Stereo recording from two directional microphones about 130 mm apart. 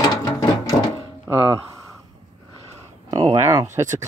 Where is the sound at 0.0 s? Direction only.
25° left (ahead or behind).